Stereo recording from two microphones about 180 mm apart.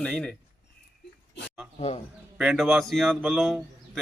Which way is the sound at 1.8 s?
35° left (ahead or behind).